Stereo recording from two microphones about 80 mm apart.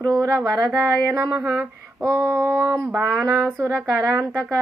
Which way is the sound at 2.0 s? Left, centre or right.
Right.